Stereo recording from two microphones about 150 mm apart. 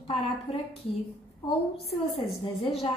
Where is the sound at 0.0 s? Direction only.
35° left (ahead or behind).